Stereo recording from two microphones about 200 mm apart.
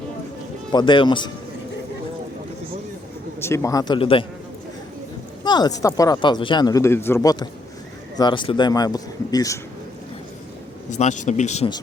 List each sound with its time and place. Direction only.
0.7 s speech: 20° left (ahead or behind)
3.4 s speech: 15° left (ahead or behind)
5.5 s speech: 20° left (ahead or behind)
10.9 s speech: 35° left (ahead or behind)